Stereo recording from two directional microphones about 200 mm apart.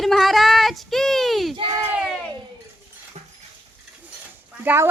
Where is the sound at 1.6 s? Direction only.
25° right (ahead or behind).